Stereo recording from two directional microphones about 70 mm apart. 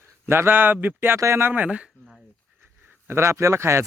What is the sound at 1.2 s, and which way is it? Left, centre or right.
Speech, right.